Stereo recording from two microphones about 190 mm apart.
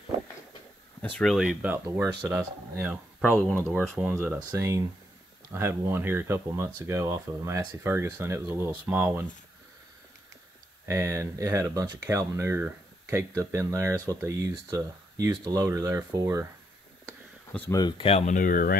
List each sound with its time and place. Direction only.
1.0 s speech: 5° left (ahead or behind)
4.5 s speech: 15° right (ahead or behind)
10.9 s speech: 15° right (ahead or behind)
17.5 s speech: 10° left (ahead or behind)
17.7 s speech: 25° left (ahead or behind); by 18.8 s 45° left (ahead or behind)